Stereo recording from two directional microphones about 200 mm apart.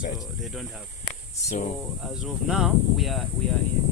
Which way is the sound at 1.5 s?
40° left (ahead or behind).